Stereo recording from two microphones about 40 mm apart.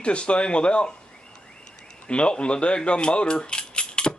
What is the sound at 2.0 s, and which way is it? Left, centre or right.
Speech, left.